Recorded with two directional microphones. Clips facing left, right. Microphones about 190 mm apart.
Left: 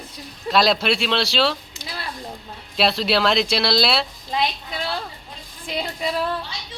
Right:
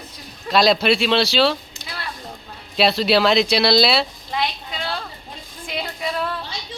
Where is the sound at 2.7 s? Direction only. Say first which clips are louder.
Right 3 dB; centre (ahead or behind).